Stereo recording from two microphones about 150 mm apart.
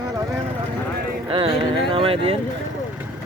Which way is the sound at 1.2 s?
35° right (ahead or behind).